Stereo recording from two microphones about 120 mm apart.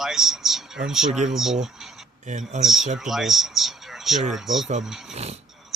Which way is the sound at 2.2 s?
80° right.